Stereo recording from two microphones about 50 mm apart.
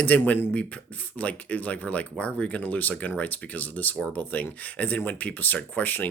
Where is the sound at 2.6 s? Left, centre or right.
Left.